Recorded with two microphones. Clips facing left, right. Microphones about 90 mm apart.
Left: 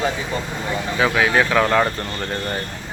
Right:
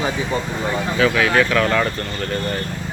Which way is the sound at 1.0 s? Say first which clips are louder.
Right 1 dB; 20° left (ahead or behind).